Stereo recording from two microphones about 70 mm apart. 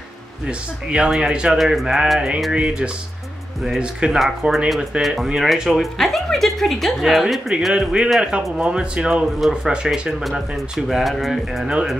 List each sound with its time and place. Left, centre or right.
0.5 s speech: centre
7.7 s speech: centre
9.4 s speech: centre